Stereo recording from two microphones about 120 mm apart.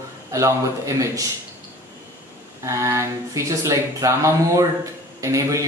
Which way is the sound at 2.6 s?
25° right (ahead or behind).